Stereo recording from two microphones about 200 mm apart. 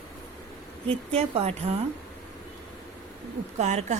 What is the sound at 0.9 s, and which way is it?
Speech, 30° right (ahead or behind).